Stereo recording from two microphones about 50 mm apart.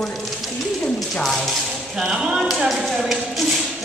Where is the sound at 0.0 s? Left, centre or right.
Centre.